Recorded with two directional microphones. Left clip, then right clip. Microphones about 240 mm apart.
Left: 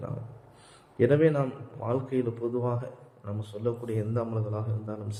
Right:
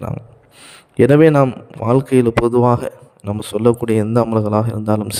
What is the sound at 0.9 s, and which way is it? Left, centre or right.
A man's voice, right.